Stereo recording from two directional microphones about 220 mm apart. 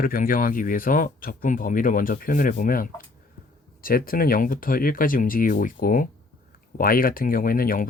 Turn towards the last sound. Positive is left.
turn(degrees=40)  # may be behind; listen again after turning